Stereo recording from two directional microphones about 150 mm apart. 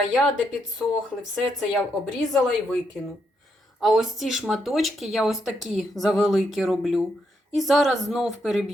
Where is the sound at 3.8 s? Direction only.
Centre (ahead or behind).